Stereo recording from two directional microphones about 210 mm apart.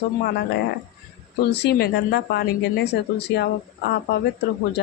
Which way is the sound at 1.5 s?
55° left (ahead or behind).